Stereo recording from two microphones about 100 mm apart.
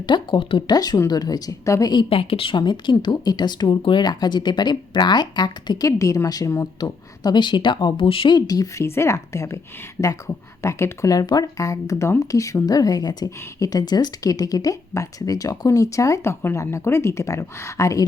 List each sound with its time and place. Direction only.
0.0 s speech: 50° left (ahead or behind)
1.0 s speech: 40° left (ahead or behind)
2.0 s speech: 65° left (ahead or behind)
8.3 s speech: 40° left (ahead or behind)
8.8 s speech: 30° left (ahead or behind)